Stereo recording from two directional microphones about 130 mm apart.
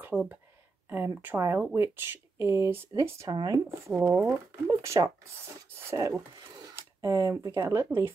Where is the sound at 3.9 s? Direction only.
15° right (ahead or behind).